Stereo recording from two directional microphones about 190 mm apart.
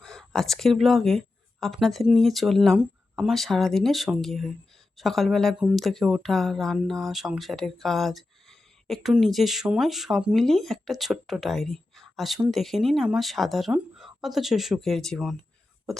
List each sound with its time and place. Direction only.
0.0 s speech: centre (ahead or behind)